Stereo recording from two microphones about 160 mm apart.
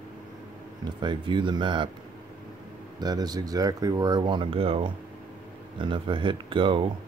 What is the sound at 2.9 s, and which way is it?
Speech, 25° right (ahead or behind).